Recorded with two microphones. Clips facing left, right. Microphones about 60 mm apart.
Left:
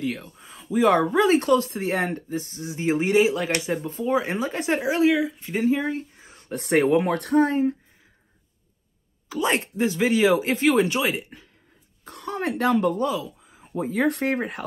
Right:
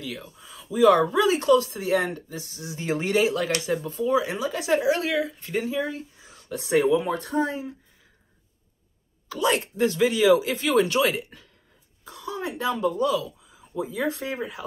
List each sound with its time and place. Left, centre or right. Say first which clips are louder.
0.0 s speech: left 6 dB; left
4.9 s speech: left 5 dB; centre
5.7 s speech: left 5 dB; left
9.3 s speech: even; left
12.0 s speech: left 3 dB; left
13.0 s a sound: right 1 dB; left
13.8 s speech: left 7 dB; left